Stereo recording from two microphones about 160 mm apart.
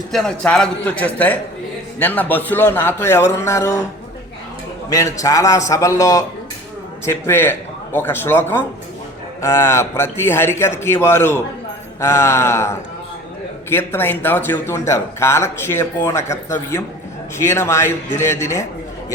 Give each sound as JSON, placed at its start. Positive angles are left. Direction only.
{"t": 0.1, "sound": "speech", "side_deg": 5}
{"t": 4.9, "sound": "a man's voice", "side_deg": 20}